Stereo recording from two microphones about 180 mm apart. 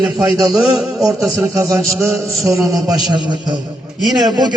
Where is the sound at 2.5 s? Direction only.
Centre (ahead or behind).